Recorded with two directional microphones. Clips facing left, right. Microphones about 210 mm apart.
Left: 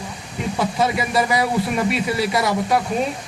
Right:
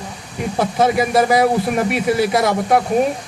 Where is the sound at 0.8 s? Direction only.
50° right (ahead or behind).